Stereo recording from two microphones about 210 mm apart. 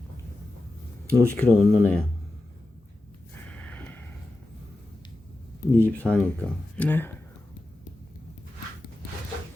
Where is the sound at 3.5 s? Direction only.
5° left (ahead or behind).